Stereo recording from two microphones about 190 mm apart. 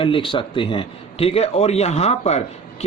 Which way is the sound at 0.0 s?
25° left (ahead or behind).